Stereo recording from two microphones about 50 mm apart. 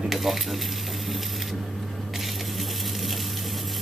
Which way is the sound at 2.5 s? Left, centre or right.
Centre.